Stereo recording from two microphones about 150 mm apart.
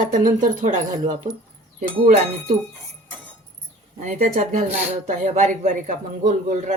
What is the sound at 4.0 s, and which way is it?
A man's voice, 55° right (ahead or behind).